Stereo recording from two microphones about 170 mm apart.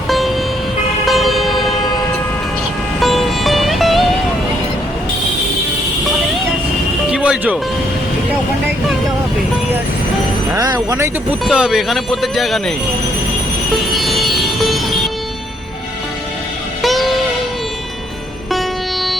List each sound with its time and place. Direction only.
0.1 s vehicle: centre (ahead or behind)
3.0 s music: centre (ahead or behind)
7.1 s music: 5° right (ahead or behind)
10.5 s speech: 20° right (ahead or behind)
11.4 s speech: 5° right (ahead or behind)
13.9 s vehicle: centre (ahead or behind)
16.8 s music: centre (ahead or behind)